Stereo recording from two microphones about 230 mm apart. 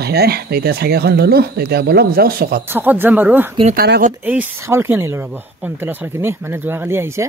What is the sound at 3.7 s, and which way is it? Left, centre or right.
Speech, right.